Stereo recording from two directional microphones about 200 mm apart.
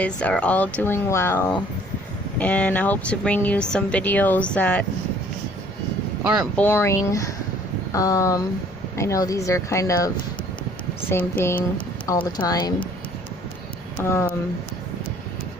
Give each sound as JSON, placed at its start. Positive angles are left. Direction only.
{"t": 0.0, "sound": "speech", "side_deg": 5}
{"t": 6.2, "sound": "speech", "side_deg": -5}
{"t": 6.6, "sound": "speech", "side_deg": 10}
{"t": 11.1, "sound": "speech", "side_deg": 10}
{"t": 12.0, "sound": "speech", "side_deg": 20}
{"t": 14.0, "sound": "speech", "side_deg": 15}